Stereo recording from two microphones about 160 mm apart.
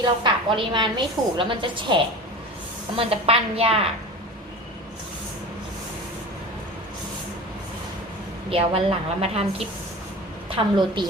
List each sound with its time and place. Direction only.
0.0 s a woman's voice: 30° right (ahead or behind)
8.4 s a woman's voice: 35° right (ahead or behind)